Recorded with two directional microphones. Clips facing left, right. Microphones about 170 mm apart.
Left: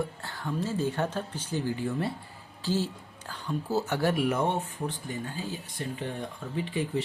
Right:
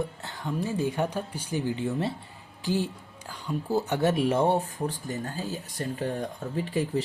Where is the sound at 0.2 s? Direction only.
20° right (ahead or behind).